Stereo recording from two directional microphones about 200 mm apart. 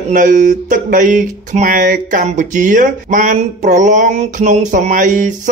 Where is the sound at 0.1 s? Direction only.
40° right (ahead or behind).